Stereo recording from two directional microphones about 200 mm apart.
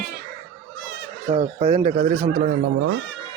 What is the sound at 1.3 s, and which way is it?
Speech, 30° right (ahead or behind).